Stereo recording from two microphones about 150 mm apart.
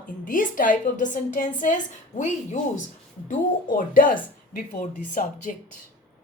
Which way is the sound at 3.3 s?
65° left (ahead or behind).